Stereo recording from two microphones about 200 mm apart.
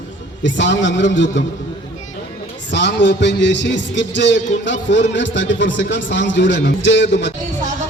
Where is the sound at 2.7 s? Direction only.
60° left (ahead or behind).